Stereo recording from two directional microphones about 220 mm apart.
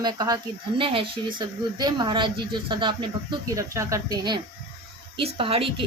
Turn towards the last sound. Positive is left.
turn(degrees=-25)  # may be behind; listen again after turning